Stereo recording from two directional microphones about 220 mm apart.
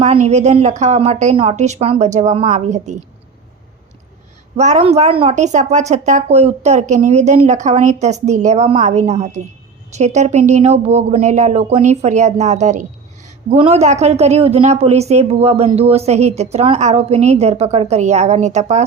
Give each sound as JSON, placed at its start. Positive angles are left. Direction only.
{"t": 0.0, "sound": "a woman's voice", "side_deg": -30}
{"t": 4.5, "sound": "a woman's voice", "side_deg": -30}